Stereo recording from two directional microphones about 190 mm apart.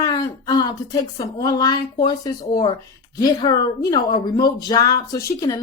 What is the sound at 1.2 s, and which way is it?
Speech, 20° left (ahead or behind).